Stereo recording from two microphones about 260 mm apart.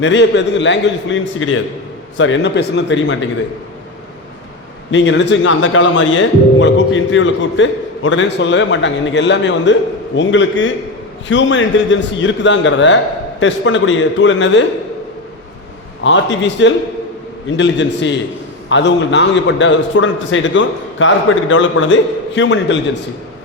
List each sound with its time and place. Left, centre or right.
0.0 s speech: left
4.9 s speech: left
16.0 s speech: left